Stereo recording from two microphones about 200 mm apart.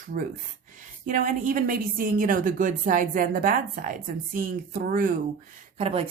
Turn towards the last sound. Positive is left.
turn(degrees=-30)  # may be behind; listen again after turning